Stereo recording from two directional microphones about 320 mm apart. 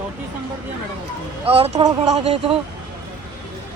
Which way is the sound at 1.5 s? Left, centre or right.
Centre.